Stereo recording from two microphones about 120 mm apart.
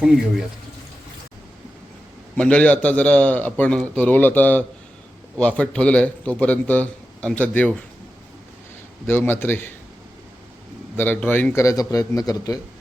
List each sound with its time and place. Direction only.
2.3 s a man's voice: 10° left (ahead or behind)
9.0 s a man's voice: 20° left (ahead or behind)
10.9 s a man's voice: 15° left (ahead or behind)